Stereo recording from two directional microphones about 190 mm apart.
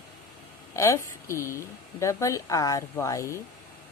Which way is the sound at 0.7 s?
15° left (ahead or behind).